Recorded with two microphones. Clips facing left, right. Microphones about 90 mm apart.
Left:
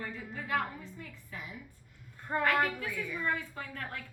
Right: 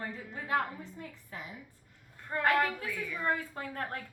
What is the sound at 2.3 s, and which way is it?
Speech, 20° left (ahead or behind).